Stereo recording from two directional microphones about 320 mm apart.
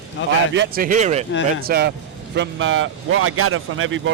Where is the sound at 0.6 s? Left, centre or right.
Right.